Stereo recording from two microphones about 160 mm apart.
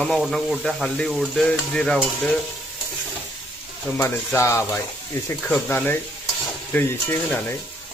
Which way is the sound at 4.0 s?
20° left (ahead or behind).